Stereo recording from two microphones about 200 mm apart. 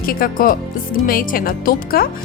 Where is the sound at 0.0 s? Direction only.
45° left (ahead or behind).